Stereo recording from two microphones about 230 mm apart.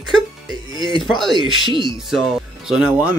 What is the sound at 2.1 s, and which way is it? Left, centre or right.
Speech, centre.